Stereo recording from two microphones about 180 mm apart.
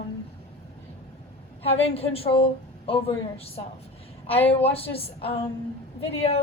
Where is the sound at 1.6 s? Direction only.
35° left (ahead or behind).